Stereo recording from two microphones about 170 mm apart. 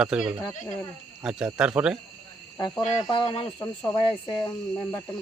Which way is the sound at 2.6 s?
25° left (ahead or behind).